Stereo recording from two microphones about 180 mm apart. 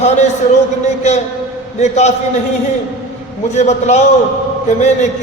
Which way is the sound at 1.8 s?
40° left (ahead or behind).